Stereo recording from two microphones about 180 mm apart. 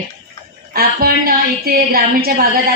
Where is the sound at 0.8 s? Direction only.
55° right (ahead or behind).